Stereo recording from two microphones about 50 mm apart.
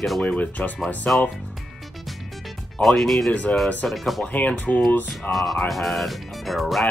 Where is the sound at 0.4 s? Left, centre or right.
Left.